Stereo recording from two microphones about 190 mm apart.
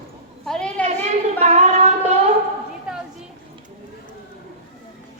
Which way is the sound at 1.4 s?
35° right (ahead or behind).